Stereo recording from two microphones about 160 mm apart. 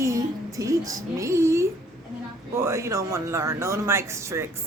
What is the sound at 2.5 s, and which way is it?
Speech, 15° right (ahead or behind).